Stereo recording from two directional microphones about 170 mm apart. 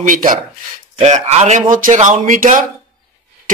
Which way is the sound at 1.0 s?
40° right (ahead or behind).